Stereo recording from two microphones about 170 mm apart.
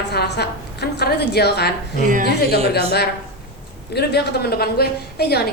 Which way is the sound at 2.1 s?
50° right (ahead or behind).